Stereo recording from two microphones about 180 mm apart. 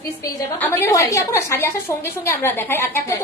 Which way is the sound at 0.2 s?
15° left (ahead or behind).